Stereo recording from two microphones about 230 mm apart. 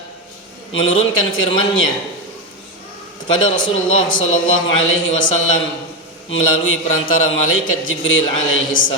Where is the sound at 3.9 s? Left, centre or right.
Left.